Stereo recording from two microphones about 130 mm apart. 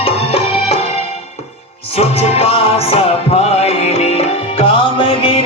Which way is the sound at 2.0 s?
50° left (ahead or behind).